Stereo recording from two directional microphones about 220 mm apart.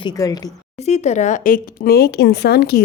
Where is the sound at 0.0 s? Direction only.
15° left (ahead or behind).